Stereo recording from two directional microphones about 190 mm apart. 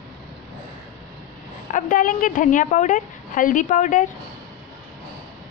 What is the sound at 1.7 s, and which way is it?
A woman's voice, 45° left (ahead or behind).